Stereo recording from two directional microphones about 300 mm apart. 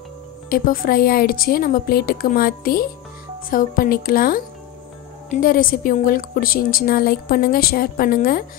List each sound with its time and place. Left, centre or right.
0.5 s a woman's voice: left